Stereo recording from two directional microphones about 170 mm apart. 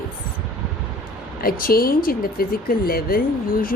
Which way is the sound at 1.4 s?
60° left (ahead or behind).